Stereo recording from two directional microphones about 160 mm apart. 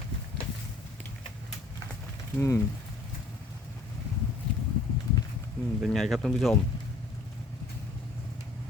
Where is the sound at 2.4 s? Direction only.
15° left (ahead or behind).